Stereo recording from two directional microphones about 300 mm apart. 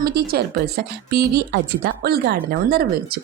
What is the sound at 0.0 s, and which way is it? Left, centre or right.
Speech, right.